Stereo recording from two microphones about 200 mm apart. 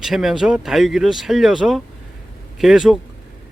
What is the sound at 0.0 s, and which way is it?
Speech, centre (ahead or behind).